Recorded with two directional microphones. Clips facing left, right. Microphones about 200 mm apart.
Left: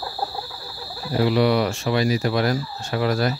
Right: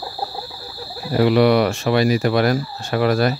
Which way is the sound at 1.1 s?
65° right (ahead or behind).